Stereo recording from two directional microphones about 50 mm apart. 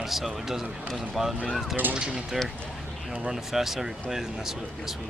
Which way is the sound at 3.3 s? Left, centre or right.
Centre.